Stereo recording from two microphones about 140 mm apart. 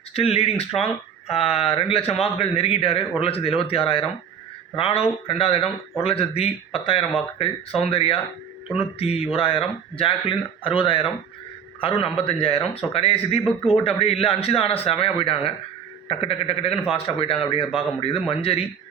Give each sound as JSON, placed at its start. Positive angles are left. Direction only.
{"t": 0.1, "sound": "a man's voice", "side_deg": 45}